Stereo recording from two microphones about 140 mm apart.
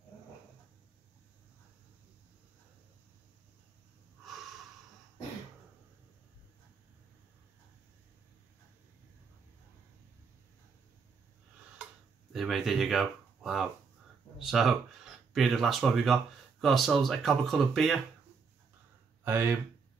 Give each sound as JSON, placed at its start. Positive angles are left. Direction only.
{"t": 11.8, "sound": "tick-tock", "side_deg": 0}
{"t": 14.4, "sound": "speech", "side_deg": 0}
{"t": 19.2, "sound": "speech", "side_deg": -20}